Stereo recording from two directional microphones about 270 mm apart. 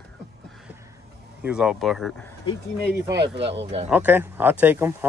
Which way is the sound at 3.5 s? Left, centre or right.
Right.